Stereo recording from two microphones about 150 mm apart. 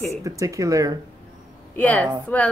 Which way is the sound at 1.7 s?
10° left (ahead or behind).